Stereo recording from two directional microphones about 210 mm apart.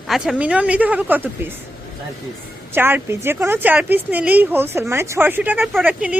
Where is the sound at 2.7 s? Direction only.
10° right (ahead or behind).